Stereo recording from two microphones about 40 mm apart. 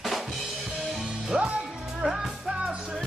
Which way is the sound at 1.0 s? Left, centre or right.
Centre.